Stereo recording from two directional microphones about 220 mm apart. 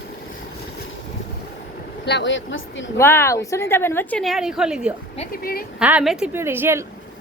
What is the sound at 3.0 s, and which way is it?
A woman's voice, 10° left (ahead or behind).